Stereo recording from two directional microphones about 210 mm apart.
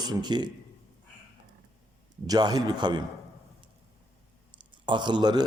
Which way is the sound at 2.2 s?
20° right (ahead or behind).